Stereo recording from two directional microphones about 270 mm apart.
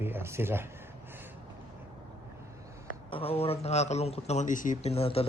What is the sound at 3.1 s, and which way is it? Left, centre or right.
A man's voice, left.